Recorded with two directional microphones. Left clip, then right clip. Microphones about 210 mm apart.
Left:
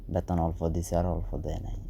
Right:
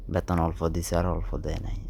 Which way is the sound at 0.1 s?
15° right (ahead or behind).